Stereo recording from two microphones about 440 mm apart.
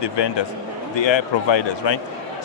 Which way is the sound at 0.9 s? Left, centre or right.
Left.